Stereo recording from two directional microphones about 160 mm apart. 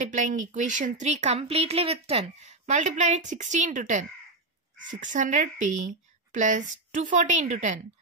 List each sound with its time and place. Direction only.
0.0 s speech: 50° right (ahead or behind)